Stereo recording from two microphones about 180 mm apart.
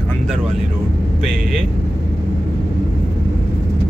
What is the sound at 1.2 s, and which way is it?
Speech, centre (ahead or behind).